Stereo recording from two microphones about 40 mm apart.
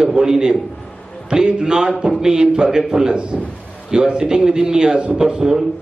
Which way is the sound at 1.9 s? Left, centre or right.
Centre.